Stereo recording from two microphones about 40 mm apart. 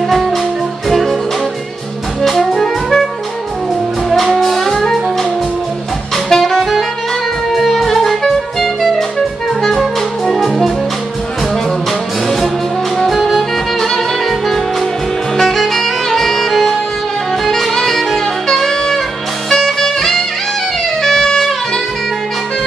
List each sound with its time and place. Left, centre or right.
0.8 s music: centre
2.2 s music: centre
4.1 s music: centre
6.3 s saxophone: centre
7.5 s music: centre
10.3 s music: centre
13.0 s music: centre
15.3 s music: centre
17.5 s saxophone: centre
19.5 s music: centre